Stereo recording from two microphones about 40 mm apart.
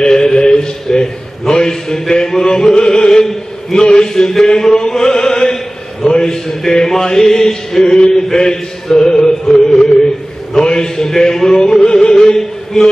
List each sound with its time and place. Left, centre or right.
0.0 s a sound: centre
4.1 s chant: centre
6.2 s music: centre
10.5 s music: centre